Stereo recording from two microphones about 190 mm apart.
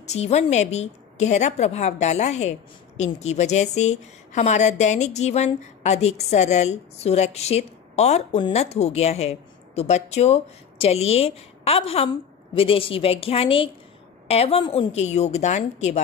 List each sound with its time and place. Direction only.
0.0 s a woman's voice: 35° left (ahead or behind)